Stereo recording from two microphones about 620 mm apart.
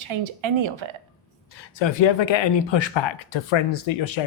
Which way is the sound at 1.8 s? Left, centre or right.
Left.